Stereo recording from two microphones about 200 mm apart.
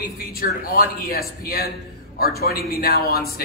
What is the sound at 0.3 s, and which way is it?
A man's voice, 50° left (ahead or behind).